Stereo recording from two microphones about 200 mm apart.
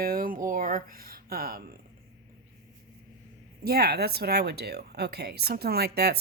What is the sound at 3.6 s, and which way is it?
Speech, 50° right (ahead or behind).